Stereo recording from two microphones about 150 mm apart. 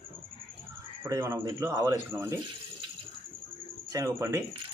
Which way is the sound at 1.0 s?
20° right (ahead or behind).